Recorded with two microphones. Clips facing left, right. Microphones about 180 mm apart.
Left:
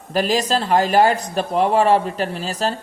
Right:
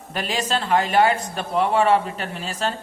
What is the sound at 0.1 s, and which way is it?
A man's voice, 40° left (ahead or behind).